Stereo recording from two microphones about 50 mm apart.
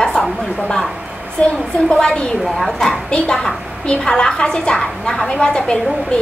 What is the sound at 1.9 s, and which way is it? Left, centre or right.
Speech, centre.